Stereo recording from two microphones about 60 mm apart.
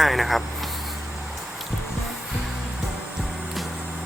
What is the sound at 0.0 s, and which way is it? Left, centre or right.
Speech, centre.